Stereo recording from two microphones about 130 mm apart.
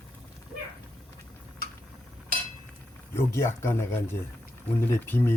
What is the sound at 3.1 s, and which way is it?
Speech, 20° left (ahead or behind).